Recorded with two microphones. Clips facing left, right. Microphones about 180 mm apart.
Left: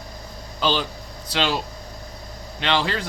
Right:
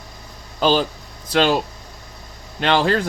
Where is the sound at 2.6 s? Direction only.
45° right (ahead or behind).